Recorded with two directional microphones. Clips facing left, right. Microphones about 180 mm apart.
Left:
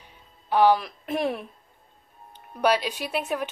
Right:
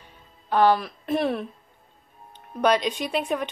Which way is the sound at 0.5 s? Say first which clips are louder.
Even; 10° left (ahead or behind).